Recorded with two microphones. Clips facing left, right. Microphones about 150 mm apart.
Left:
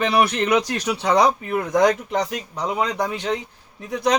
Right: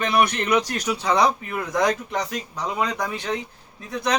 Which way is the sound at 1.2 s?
30° left (ahead or behind).